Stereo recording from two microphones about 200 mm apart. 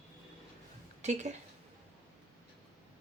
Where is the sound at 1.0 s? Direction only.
35° right (ahead or behind).